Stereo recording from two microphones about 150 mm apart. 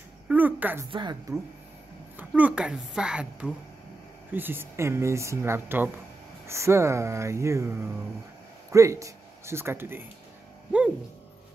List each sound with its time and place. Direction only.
0.3 s speech: 10° right (ahead or behind)
0.8 s speech: 30° right (ahead or behind)
2.1 s speech: 10° right (ahead or behind)